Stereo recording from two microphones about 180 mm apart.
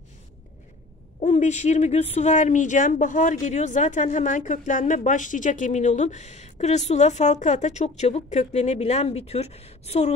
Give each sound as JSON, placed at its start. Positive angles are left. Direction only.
{"t": 1.2, "sound": "speech", "side_deg": 40}